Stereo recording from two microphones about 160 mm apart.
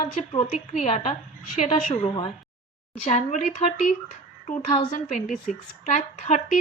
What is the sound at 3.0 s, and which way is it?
Speech, 45° left (ahead or behind).